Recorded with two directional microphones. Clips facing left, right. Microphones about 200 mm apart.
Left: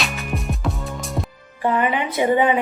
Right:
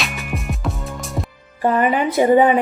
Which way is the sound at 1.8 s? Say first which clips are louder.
Right 6 dB; 40° right (ahead or behind).